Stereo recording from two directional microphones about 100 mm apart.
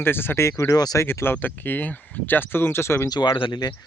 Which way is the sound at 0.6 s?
40° left (ahead or behind).